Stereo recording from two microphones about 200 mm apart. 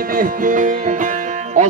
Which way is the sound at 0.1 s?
45° right (ahead or behind).